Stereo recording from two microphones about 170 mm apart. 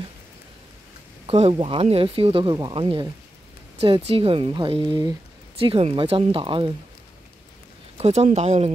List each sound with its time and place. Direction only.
1.2 s speech: 35° right (ahead or behind)
8.0 s speech: 40° right (ahead or behind)